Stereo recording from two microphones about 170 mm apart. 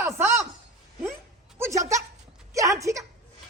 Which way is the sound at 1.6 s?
15° right (ahead or behind).